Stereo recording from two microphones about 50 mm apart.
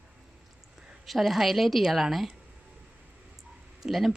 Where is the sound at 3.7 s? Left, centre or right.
Centre.